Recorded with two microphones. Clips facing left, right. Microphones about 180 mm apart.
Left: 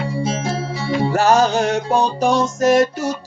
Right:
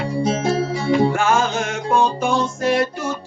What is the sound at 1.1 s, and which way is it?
Music, 40° left (ahead or behind).